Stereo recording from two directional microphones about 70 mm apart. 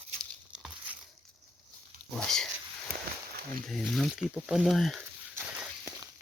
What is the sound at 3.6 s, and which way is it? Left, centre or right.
Speech, centre.